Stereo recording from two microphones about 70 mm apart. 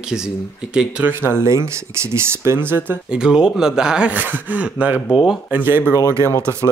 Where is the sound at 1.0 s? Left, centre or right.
Right.